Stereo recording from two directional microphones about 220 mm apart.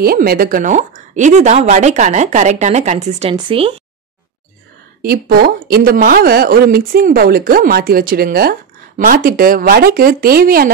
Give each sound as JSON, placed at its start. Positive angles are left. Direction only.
{"t": 0.0, "sound": "a woman's voice", "side_deg": -45}
{"t": 5.0, "sound": "a woman's voice", "side_deg": -45}